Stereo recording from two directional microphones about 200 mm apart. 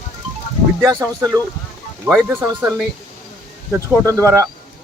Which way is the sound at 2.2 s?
10° right (ahead or behind).